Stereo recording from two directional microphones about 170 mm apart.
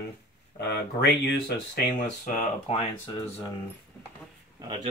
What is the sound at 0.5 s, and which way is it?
Speech, 75° left (ahead or behind).